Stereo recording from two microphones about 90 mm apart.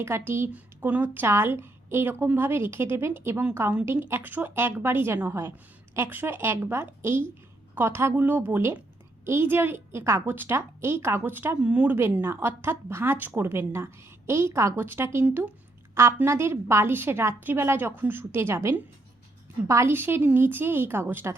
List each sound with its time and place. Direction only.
0.0 s a woman's voice: 25° right (ahead or behind)
11.9 s a woman's voice: 25° right (ahead or behind)